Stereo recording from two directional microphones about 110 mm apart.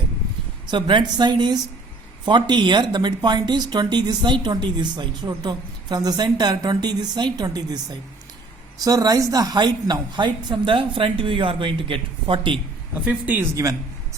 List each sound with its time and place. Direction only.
0.7 s a woman's voice: 45° right (ahead or behind)
13.1 s speech: 15° right (ahead or behind)